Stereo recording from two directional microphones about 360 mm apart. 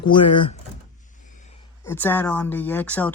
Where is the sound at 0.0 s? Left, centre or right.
Centre.